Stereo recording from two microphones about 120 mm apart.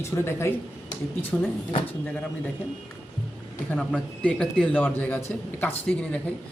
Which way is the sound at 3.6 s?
10° left (ahead or behind).